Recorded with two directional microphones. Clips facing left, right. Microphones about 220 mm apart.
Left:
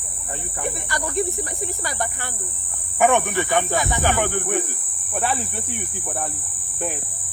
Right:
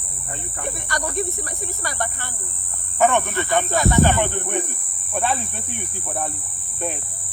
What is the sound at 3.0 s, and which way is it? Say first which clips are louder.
Speech: left 1 dB; 15° left (ahead or behind).